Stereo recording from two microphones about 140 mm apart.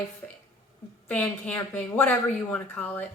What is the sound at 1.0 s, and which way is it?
A woman's voice, 10° left (ahead or behind).